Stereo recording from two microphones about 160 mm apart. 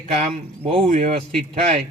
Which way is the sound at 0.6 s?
35° right (ahead or behind).